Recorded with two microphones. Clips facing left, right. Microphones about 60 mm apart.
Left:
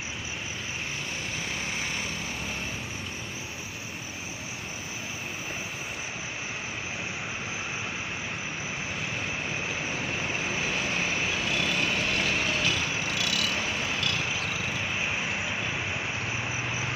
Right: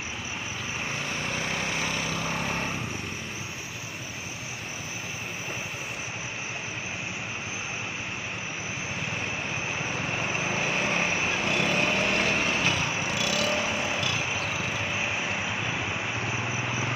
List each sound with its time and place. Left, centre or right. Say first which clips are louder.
10.1 s vehicle: right 2 dB; centre
10.5 s vehicle: right 3 dB; right
13.8 s vehicle: right 1 dB; centre
16.3 s cricket: right 2 dB; centre